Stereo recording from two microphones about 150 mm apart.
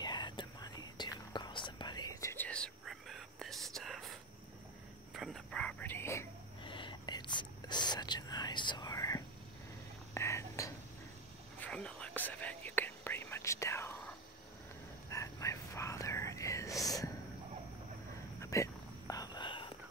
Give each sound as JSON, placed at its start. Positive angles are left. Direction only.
{"t": 0.0, "sound": "whispering", "side_deg": 30}
{"t": 6.6, "sound": "whispering", "side_deg": 35}
{"t": 11.6, "sound": "whispering", "side_deg": 5}
{"t": 15.0, "sound": "whispering", "side_deg": 20}
{"t": 18.4, "sound": "a sound", "side_deg": 20}